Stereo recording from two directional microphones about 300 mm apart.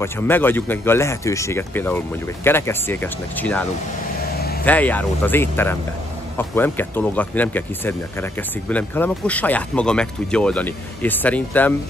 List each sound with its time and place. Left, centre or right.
0.0 s speech: centre
4.3 s vehicle: left
4.6 s speech: centre